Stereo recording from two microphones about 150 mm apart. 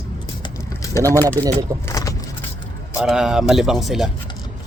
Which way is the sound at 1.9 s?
25° left (ahead or behind).